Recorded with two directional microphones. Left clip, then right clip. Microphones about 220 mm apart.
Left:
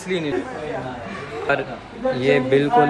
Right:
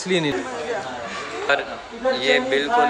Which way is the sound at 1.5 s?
Centre (ahead or behind).